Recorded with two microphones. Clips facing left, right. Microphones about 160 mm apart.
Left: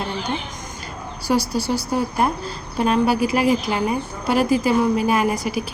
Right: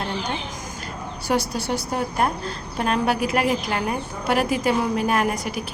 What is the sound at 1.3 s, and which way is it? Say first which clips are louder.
A woman's voice: left 3 dB; centre (ahead or behind).